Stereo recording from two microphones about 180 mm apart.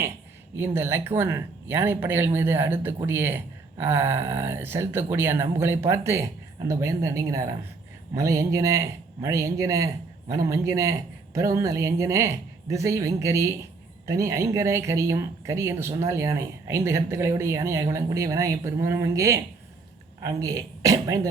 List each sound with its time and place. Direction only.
0.5 s speech: 10° right (ahead or behind)